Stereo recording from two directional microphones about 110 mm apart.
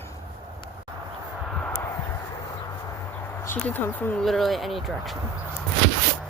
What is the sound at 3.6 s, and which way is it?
Speech, 15° left (ahead or behind).